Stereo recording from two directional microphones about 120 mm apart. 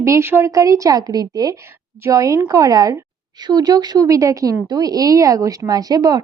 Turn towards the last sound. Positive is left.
turn(degrees=-30)  # may be behind; listen again after turning